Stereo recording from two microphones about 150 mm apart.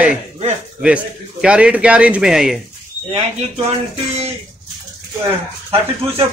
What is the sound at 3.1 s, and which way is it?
Speech, 45° right (ahead or behind).